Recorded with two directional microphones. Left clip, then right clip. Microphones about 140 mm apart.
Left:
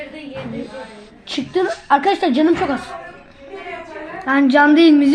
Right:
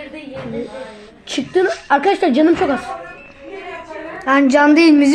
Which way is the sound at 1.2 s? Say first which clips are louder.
Right 3 dB; 40° right (ahead or behind).